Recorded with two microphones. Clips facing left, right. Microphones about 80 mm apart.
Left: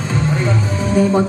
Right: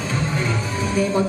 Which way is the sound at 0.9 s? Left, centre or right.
Left.